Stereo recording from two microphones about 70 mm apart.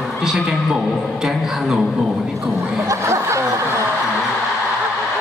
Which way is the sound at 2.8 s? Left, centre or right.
Right.